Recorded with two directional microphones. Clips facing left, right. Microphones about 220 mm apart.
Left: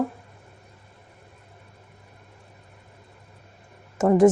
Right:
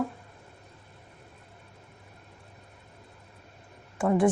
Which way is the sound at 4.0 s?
40° left (ahead or behind).